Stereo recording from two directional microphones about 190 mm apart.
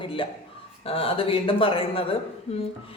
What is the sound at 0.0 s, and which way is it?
Speech, 25° left (ahead or behind).